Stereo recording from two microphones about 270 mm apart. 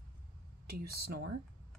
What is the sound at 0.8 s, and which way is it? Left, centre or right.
Speech, right.